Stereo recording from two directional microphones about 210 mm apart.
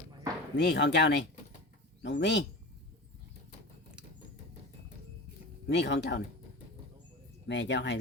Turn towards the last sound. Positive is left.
turn(degrees=55)  # may be behind; listen again after turning